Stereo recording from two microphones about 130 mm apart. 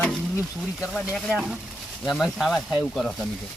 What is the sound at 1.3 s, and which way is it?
Speech, 5° right (ahead or behind).